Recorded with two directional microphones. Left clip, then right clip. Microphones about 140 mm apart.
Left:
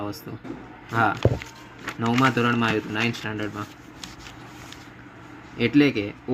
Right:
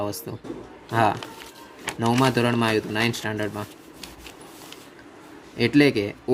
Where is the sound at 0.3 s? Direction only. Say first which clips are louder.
Right 3 dB; 90° right.